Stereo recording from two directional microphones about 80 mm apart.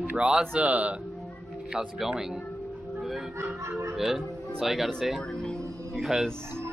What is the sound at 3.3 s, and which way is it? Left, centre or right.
Music, right.